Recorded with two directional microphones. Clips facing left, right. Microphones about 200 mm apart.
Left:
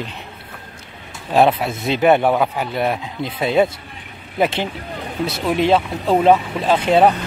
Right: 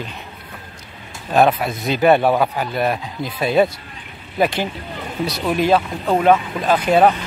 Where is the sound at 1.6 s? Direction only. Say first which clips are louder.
Even; 25° left (ahead or behind).